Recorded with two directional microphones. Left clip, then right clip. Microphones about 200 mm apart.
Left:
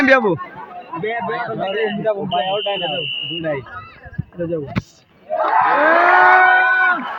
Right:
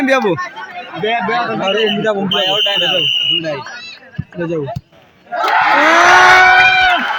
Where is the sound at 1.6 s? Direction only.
50° right (ahead or behind).